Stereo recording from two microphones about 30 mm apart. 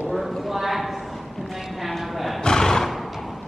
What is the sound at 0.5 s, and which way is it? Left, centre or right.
Clip-clop, centre.